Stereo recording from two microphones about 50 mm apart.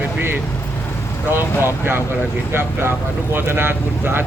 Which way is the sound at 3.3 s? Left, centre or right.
Right.